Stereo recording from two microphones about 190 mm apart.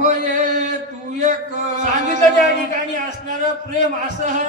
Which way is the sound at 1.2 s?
40° right (ahead or behind).